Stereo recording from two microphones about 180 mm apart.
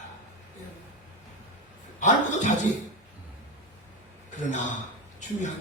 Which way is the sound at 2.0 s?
40° left (ahead or behind).